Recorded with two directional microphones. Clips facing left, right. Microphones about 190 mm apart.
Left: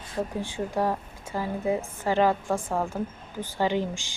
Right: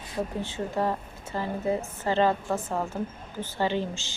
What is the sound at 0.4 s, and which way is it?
Speech, 10° left (ahead or behind).